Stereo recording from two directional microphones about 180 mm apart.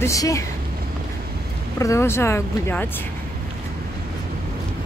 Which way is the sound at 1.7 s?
15° left (ahead or behind).